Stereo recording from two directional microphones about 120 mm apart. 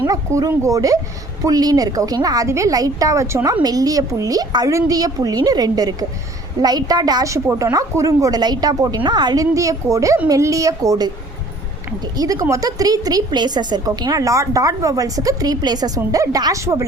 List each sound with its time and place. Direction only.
0.1 s a woman's voice: 30° right (ahead or behind)
12.1 s a woman's voice: 30° right (ahead or behind)